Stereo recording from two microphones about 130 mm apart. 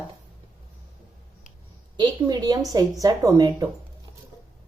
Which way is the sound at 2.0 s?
30° right (ahead or behind).